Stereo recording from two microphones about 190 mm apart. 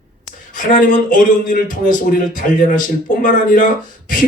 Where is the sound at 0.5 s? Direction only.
45° left (ahead or behind).